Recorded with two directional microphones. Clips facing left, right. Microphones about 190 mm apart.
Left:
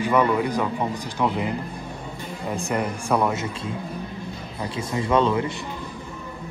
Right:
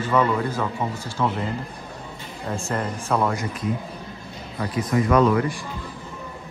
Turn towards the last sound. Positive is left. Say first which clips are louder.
# right 3 dB
turn(degrees=25)  # may be behind; listen again after turning